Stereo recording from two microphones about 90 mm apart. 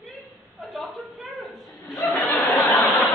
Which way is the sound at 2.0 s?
30° left (ahead or behind).